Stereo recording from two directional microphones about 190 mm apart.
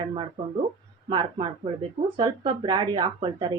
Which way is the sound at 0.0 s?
25° right (ahead or behind).